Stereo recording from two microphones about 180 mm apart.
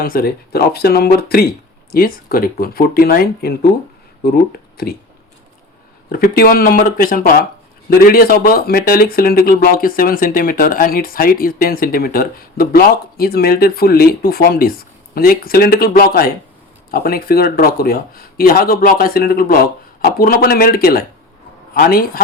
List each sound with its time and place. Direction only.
0.0 s speech: 55° left (ahead or behind)
6.1 s speech: 55° left (ahead or behind)